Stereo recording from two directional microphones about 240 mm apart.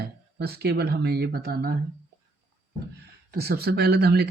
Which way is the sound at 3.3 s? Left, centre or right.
Right.